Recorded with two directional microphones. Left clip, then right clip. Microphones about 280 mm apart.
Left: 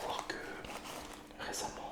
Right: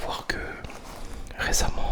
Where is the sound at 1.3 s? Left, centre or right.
Right.